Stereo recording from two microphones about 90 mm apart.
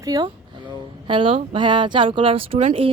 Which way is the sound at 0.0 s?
45° right (ahead or behind).